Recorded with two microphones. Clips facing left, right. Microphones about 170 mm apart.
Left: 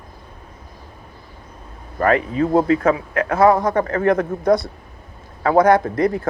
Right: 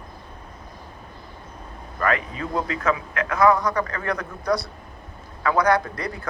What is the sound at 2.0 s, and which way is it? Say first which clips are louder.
Speech: left 8 dB; 40° left (ahead or behind).